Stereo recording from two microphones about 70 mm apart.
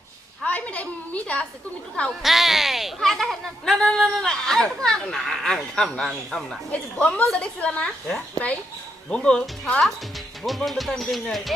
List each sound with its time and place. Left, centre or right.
0.4 s a woman's voice: left
2.2 s speech: centre
6.7 s a woman's voice: centre
10.7 s speech: centre